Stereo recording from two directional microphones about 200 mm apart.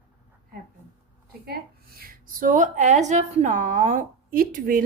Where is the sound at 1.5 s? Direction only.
50° right (ahead or behind).